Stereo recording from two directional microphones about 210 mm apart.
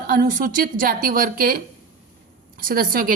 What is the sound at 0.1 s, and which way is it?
A woman's voice, 40° right (ahead or behind).